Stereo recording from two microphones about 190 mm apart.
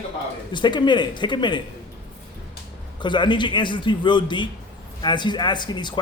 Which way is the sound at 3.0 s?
25° left (ahead or behind).